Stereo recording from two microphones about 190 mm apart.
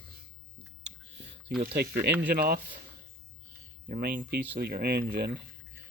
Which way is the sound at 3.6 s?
40° right (ahead or behind).